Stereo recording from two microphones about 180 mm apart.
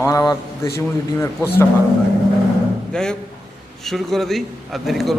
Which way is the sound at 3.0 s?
5° left (ahead or behind).